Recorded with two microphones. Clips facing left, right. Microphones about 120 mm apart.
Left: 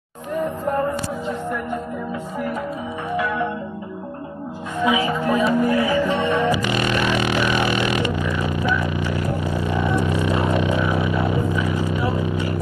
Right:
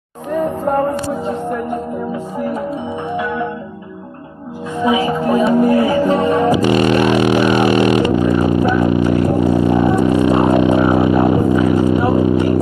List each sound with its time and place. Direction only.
0.3 s music: 50° right (ahead or behind)
4.8 s music: 40° right (ahead or behind)
7.9 s vehicle: 40° right (ahead or behind)
9.7 s music: 50° right (ahead or behind)